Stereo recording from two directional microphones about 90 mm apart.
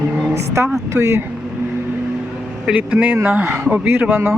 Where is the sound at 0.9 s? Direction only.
30° right (ahead or behind).